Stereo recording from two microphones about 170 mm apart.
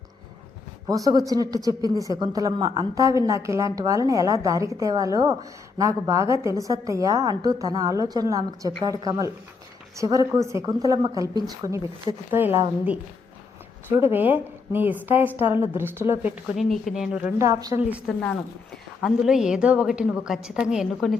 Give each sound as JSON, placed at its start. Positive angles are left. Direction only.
{"t": 0.9, "sound": "a woman's voice", "side_deg": -20}
{"t": 14.1, "sound": "a woman's voice", "side_deg": -10}
{"t": 18.2, "sound": "a woman's voice", "side_deg": 5}